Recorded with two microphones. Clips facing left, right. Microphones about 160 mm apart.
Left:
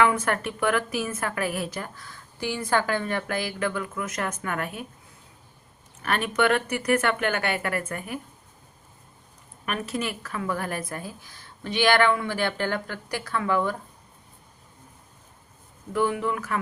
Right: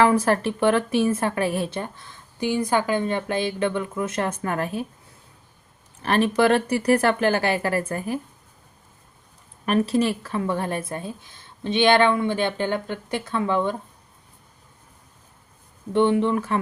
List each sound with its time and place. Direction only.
0.0 s a woman's voice: 35° right (ahead or behind)
6.0 s speech: 30° right (ahead or behind)
9.6 s a woman's voice: 30° right (ahead or behind)
15.9 s a woman's voice: 30° right (ahead or behind)